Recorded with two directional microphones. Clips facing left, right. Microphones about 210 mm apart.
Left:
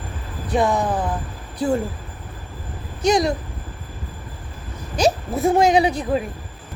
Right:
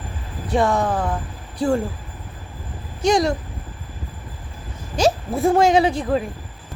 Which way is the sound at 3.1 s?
20° left (ahead or behind).